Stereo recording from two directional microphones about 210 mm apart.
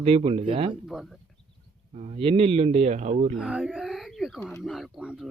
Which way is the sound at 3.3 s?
5° right (ahead or behind).